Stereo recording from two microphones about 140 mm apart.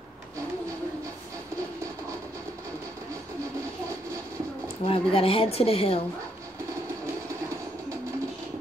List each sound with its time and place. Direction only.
4.8 s a woman's voice: 45° left (ahead or behind)